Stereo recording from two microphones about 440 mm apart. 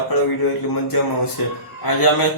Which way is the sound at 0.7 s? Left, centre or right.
Left.